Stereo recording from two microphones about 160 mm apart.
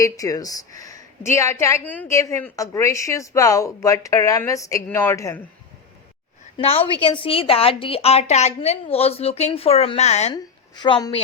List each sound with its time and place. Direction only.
0.0 s a woman's voice: 20° left (ahead or behind)
6.6 s a woman's voice: 35° left (ahead or behind)
10.3 s a woman's voice: 30° left (ahead or behind)